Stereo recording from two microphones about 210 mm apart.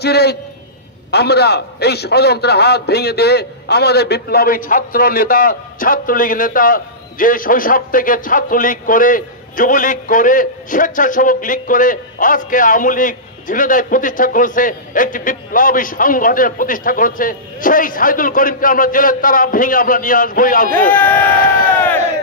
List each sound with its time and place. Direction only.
0.0 s a man's voice: 50° left (ahead or behind)
20.9 s speech: 10° left (ahead or behind)